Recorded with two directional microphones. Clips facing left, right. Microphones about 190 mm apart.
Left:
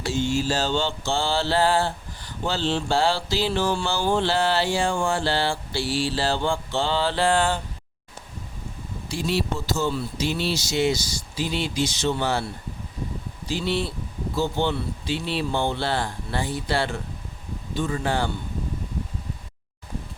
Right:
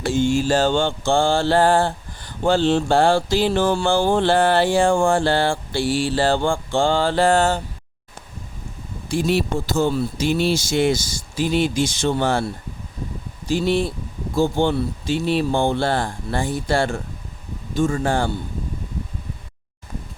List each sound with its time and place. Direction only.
0.0 s mantra: 50° right (ahead or behind)
9.0 s mantra: 55° right (ahead or behind)
13.5 s mantra: 50° right (ahead or behind)